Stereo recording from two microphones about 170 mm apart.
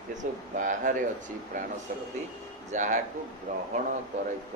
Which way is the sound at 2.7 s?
45° right (ahead or behind).